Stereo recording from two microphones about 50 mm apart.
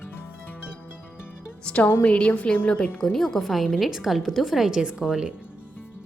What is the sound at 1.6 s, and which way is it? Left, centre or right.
A woman's voice, left.